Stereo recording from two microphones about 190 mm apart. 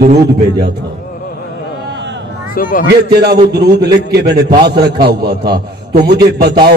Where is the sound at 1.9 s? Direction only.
65° right (ahead or behind).